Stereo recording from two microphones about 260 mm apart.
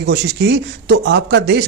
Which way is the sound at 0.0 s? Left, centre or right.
Right.